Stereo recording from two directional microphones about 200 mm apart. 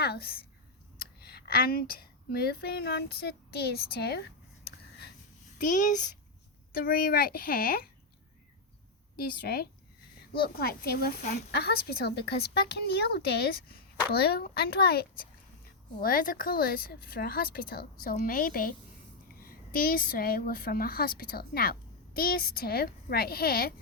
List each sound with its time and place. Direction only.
0.0 s a woman's voice: 50° left (ahead or behind)
5.5 s a child's voice: 40° left (ahead or behind)
9.1 s a woman's voice: 50° left (ahead or behind)